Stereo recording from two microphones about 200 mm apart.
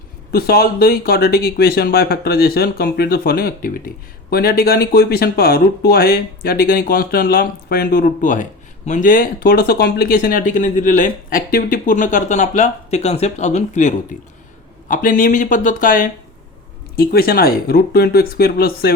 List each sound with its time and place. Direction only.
0.3 s speech: 50° left (ahead or behind)